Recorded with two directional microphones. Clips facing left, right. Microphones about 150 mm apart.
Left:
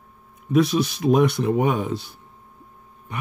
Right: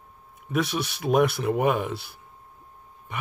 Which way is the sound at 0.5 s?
Centre (ahead or behind).